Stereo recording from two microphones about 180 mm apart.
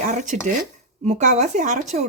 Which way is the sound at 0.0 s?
45° right (ahead or behind).